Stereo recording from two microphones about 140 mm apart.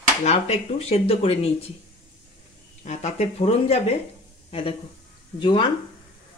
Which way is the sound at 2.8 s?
50° left (ahead or behind).